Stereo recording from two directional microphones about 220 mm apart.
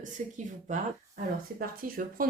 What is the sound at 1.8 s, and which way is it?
Speech, 40° right (ahead or behind).